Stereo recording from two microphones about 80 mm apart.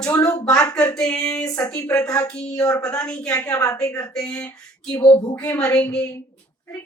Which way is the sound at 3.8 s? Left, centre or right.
Left.